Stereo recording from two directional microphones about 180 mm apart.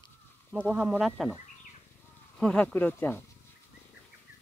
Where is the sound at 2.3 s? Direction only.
5° left (ahead or behind).